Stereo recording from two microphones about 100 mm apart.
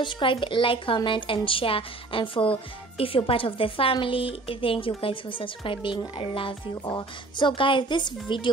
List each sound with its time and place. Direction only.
0.0 s speech: 55° left (ahead or behind)